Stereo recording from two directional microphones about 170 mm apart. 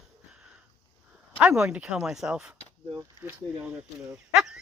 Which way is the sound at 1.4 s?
5° right (ahead or behind).